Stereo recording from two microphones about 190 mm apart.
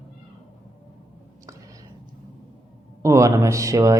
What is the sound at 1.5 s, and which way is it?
Whispering, 15° right (ahead or behind).